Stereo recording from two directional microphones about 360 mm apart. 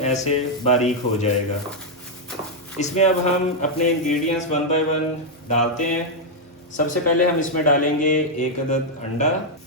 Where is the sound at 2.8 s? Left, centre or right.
Centre.